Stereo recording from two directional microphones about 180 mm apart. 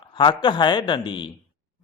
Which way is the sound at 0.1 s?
25° left (ahead or behind).